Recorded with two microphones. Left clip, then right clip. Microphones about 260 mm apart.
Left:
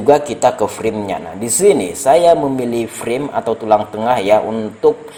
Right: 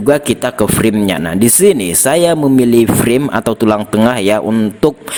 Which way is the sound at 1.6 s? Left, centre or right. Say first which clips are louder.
Left 1 dB; right.